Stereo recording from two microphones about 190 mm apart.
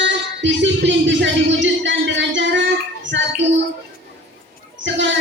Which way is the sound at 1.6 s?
75° right (ahead or behind).